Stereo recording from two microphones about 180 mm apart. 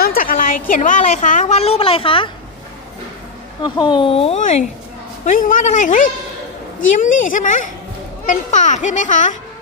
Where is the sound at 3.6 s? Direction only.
25° left (ahead or behind).